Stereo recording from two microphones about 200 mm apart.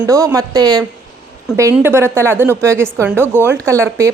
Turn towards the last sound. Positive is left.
turn(degrees=-15)  # may be behind; listen again after turning